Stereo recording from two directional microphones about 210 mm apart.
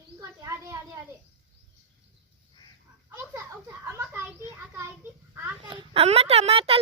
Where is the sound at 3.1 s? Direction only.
15° right (ahead or behind).